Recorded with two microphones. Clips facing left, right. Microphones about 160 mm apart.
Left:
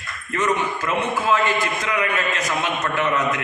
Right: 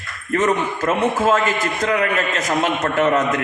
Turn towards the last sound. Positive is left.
turn(degrees=-40)  # may be behind; listen again after turning